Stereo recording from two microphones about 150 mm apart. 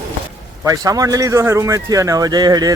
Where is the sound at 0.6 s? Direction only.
20° right (ahead or behind).